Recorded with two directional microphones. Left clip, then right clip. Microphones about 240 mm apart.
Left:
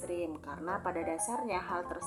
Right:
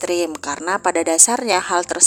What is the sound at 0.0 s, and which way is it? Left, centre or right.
A woman's voice, right.